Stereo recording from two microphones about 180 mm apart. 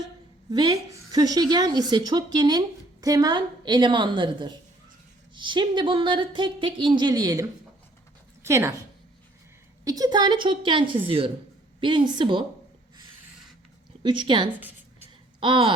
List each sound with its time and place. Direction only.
0.5 s speech: 25° right (ahead or behind)
8.4 s speech: 15° right (ahead or behind)
9.8 s speech: 20° right (ahead or behind)
14.0 s speech: 25° right (ahead or behind)